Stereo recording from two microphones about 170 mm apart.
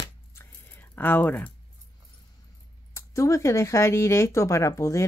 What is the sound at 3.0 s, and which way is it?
Speech, 15° left (ahead or behind).